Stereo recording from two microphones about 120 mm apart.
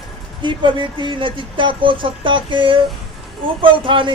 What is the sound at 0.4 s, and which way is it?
Speech, 40° right (ahead or behind).